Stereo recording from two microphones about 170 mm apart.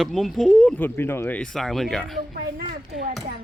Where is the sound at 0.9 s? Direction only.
15° left (ahead or behind).